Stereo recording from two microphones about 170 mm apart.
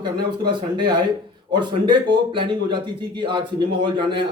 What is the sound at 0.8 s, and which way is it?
Speech, 25° right (ahead or behind).